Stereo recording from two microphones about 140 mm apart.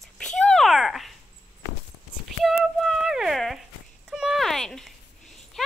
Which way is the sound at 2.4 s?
Centre (ahead or behind).